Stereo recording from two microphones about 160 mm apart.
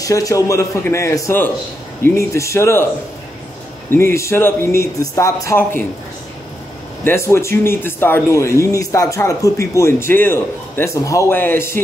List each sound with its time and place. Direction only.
0.0 s a man's voice: 20° left (ahead or behind)
3.9 s speech: 15° left (ahead or behind)
7.1 s speech: 15° left (ahead or behind)